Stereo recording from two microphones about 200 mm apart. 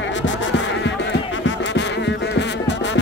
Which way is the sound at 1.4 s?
65° left (ahead or behind).